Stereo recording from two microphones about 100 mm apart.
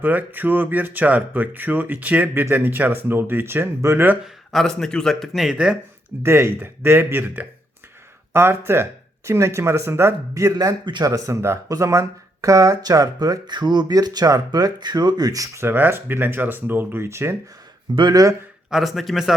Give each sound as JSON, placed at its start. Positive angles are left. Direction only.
{"t": 0.0, "sound": "speech", "side_deg": -15}
{"t": 4.5, "sound": "speech", "side_deg": 5}
{"t": 6.2, "sound": "speech", "side_deg": -25}
{"t": 10.8, "sound": "speech", "side_deg": -45}
{"t": 11.3, "sound": "speech", "side_deg": -25}
{"t": 15.6, "sound": "speech", "side_deg": -20}
{"t": 17.9, "sound": "speech", "side_deg": -50}
{"t": 18.7, "sound": "speech", "side_deg": 0}